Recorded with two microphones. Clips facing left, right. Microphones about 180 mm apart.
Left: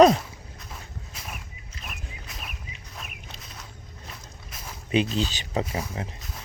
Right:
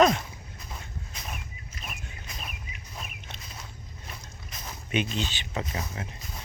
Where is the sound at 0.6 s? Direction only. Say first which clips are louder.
Right 1 dB; 5° left (ahead or behind).